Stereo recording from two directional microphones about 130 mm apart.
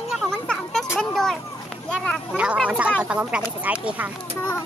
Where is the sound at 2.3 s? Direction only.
10° right (ahead or behind).